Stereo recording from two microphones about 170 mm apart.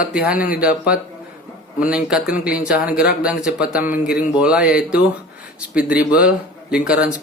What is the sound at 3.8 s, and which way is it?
Speech, 55° left (ahead or behind).